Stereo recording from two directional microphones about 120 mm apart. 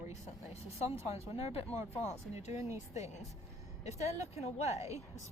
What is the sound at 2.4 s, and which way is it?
Speech, 25° right (ahead or behind).